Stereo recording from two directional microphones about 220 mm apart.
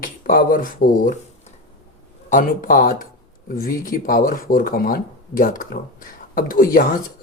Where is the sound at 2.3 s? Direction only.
40° left (ahead or behind).